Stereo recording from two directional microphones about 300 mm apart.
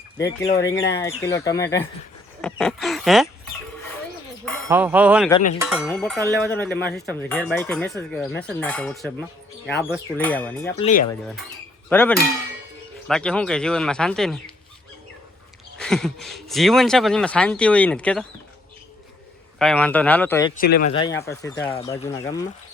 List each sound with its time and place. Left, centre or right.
0.2 s speech: centre
10.8 s speech: left
11.1 s speech: centre
11.9 s cowbell: centre
13.1 s speech: centre
15.8 s speech: centre
19.5 s speech: centre
20.6 s speech: left
20.9 s speech: centre